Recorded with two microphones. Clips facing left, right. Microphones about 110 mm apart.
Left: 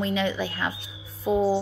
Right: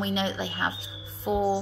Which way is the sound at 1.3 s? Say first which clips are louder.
Left 3 dB; 30° left (ahead or behind).